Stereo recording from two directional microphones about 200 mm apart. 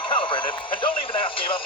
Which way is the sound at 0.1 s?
25° left (ahead or behind).